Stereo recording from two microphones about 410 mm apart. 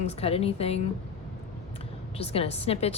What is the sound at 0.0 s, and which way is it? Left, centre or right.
Speech, centre.